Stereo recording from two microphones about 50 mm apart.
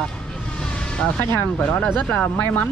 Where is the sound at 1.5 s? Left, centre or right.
Left.